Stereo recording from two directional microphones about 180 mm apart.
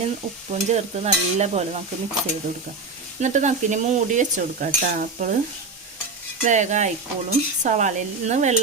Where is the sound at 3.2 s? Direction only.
40° right (ahead or behind).